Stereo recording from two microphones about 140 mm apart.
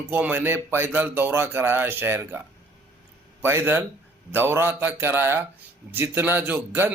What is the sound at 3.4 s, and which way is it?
Speech, 15° right (ahead or behind).